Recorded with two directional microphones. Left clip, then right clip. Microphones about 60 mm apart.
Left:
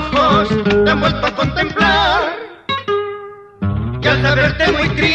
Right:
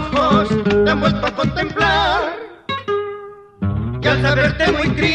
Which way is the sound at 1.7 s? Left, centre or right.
Centre.